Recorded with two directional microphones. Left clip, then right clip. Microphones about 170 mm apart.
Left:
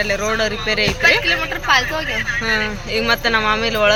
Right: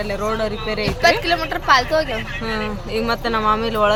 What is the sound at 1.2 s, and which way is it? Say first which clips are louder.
Speech: left 1 dB; 90° right.